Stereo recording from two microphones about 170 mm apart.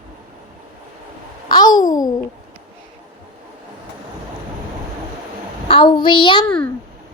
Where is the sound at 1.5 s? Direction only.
25° left (ahead or behind).